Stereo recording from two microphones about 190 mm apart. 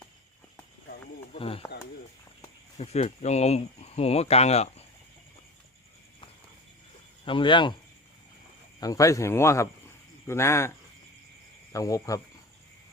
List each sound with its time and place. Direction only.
1.3 s speech: 30° left (ahead or behind)
2.7 s speech: 35° left (ahead or behind)
7.3 s speech: 25° left (ahead or behind)
8.8 s speech: 15° left (ahead or behind)
11.7 s speech: 15° left (ahead or behind)